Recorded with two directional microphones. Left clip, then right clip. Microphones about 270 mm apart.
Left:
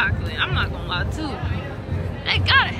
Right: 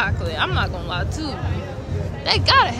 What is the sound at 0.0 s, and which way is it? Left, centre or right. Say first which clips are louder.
Speech: even; centre.